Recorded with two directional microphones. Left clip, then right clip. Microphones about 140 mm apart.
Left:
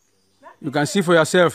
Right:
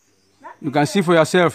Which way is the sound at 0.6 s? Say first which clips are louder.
Right 2 dB; 15° left (ahead or behind).